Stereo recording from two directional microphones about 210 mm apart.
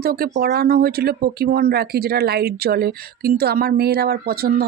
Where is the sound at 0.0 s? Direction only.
45° right (ahead or behind).